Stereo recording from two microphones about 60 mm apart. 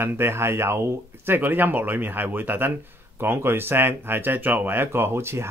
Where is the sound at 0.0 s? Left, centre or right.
Right.